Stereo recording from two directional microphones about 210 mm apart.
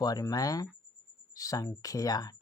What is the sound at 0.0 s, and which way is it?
Speech, 15° left (ahead or behind).